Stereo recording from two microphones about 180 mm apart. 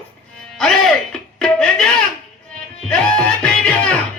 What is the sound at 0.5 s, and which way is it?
Music, centre (ahead or behind).